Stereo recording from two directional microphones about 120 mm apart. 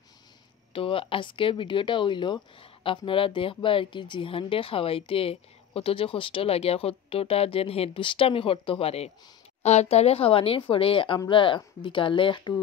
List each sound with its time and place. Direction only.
0.7 s speech: 50° left (ahead or behind)